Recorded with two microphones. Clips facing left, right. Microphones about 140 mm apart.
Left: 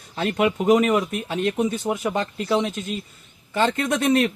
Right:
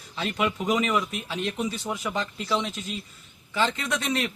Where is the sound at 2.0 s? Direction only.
50° left (ahead or behind).